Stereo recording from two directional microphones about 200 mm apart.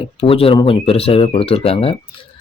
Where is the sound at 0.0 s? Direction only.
30° left (ahead or behind).